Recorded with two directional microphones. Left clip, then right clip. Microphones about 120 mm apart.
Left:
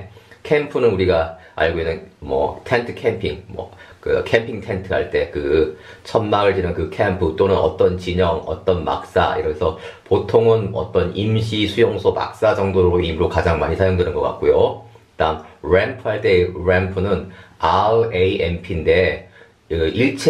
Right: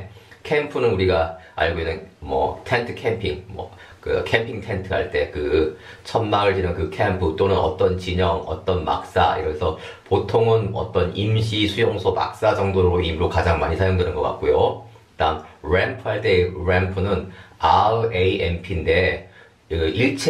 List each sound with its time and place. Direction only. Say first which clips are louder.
0.5 s speech: left 4 dB; 30° left (ahead or behind)